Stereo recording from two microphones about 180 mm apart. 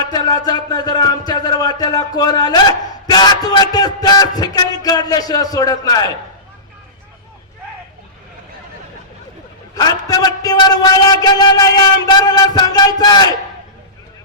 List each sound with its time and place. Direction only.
0.1 s a man's voice: 20° left (ahead or behind)
9.7 s a man's voice: 20° left (ahead or behind)